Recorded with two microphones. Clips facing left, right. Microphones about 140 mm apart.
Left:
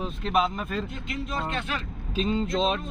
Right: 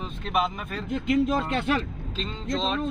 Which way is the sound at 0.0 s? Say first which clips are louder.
Left 2 dB; centre (ahead or behind).